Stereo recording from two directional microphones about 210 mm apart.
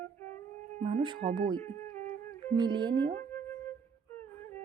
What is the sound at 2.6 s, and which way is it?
Speech, 20° right (ahead or behind).